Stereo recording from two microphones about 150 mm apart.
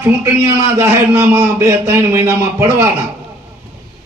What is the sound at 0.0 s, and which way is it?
A man's voice, 20° right (ahead or behind).